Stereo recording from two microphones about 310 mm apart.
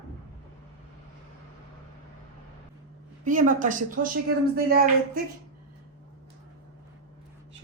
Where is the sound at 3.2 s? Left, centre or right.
Right.